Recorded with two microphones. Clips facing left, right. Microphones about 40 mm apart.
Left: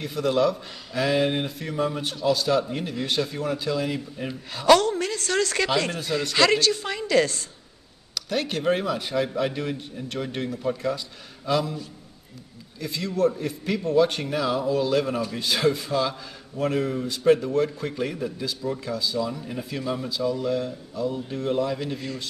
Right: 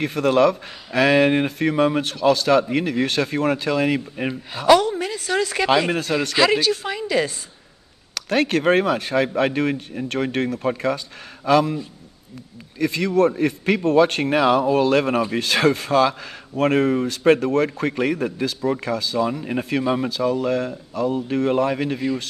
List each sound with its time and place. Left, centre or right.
0.0 s speech: right
4.6 s a woman's voice: centre
8.1 s speech: right
12.7 s speech: right
22.0 s a woman's voice: centre